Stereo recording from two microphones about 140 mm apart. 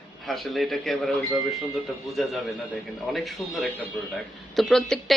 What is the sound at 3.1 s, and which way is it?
A man's voice, centre (ahead or behind).